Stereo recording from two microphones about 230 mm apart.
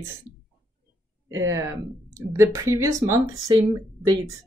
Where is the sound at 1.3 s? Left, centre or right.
Centre.